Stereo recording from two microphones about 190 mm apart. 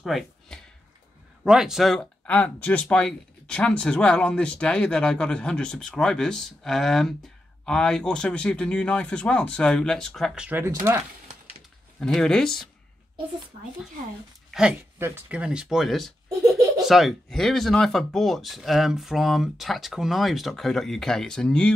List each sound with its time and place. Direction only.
0.0 s a sound: centre (ahead or behind)
1.4 s speech: 5° right (ahead or behind)
12.0 s speech: 5° left (ahead or behind)
14.5 s speech: 5° right (ahead or behind)